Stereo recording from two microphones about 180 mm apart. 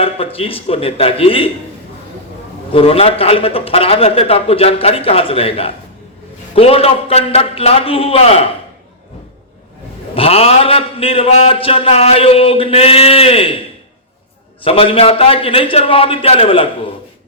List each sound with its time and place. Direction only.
0.3 s a man's voice: 30° left (ahead or behind)
2.7 s a man's voice: 30° left (ahead or behind)
10.2 s a man's voice: 35° left (ahead or behind)
14.6 s a man's voice: 30° left (ahead or behind)